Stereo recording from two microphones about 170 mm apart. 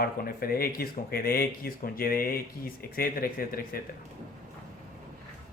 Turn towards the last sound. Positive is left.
turn(degrees=60)  # may be behind; listen again after turning